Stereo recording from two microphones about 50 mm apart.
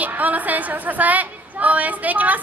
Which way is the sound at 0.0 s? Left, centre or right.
Right.